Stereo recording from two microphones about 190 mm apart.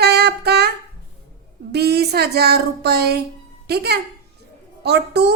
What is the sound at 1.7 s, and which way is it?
A woman's voice, 60° right (ahead or behind).